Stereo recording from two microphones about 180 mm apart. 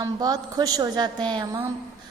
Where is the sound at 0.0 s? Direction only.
20° right (ahead or behind).